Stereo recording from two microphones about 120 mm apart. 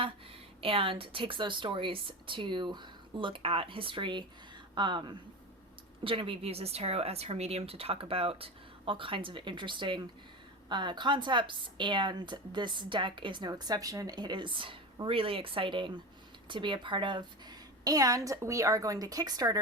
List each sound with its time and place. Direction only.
0.6 s a woman's voice: 50° right (ahead or behind); by 19.5 s 30° right (ahead or behind)